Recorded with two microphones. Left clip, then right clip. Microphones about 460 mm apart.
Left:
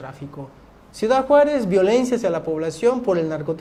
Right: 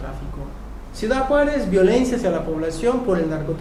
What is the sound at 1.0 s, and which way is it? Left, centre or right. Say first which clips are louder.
Speech: left 3 dB; left.